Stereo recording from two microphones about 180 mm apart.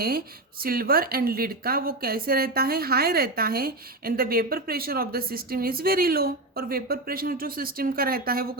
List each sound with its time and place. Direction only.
0.6 s a woman's voice: 55° right (ahead or behind)